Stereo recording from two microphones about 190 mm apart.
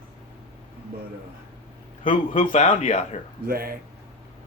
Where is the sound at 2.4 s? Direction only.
40° left (ahead or behind).